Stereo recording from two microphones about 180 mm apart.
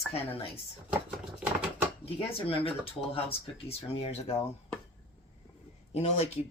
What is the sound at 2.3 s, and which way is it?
Speech, 30° left (ahead or behind).